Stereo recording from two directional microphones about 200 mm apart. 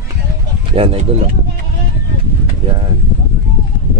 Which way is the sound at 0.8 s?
30° right (ahead or behind).